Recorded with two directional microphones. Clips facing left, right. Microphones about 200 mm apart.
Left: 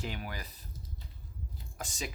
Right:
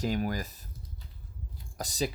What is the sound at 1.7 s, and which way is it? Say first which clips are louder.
Speech: right 9 dB; 40° right (ahead or behind).